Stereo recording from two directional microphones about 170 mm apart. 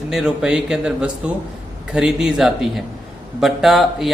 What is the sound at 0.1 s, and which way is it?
Speech, 5° right (ahead or behind).